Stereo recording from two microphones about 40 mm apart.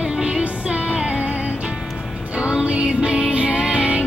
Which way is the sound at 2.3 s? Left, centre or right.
Right.